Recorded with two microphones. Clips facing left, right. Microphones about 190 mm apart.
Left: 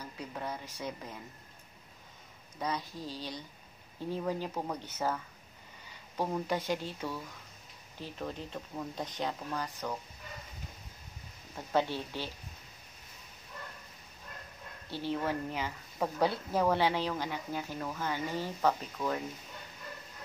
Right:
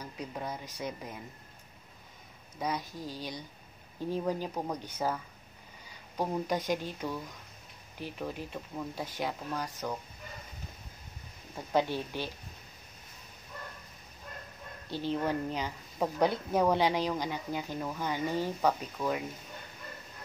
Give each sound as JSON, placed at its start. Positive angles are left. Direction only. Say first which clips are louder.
{"t": 0.0, "sound": "a woman's voice", "louder": "right 1 dB", "side_deg": -10}
{"t": 2.6, "sound": "a woman's voice", "louder": "right 1 dB", "side_deg": -10}
{"t": 11.5, "sound": "a woman's voice", "louder": "right 1 dB", "side_deg": -15}
{"t": 14.9, "sound": "a woman's voice", "louder": "right 2 dB", "side_deg": -15}